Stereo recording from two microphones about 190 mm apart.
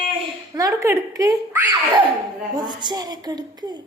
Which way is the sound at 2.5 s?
20° right (ahead or behind).